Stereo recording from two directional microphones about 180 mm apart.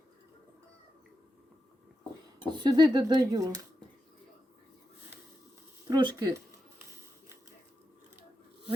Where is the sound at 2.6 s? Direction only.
25° right (ahead or behind).